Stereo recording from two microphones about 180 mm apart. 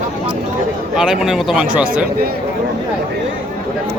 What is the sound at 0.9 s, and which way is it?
A man's voice, 5° right (ahead or behind).